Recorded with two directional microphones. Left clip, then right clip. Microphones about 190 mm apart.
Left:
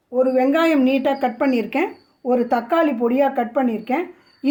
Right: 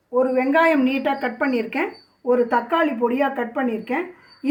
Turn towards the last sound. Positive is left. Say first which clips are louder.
# left 3 dB
turn(degrees=50)  # may be behind; listen again after turning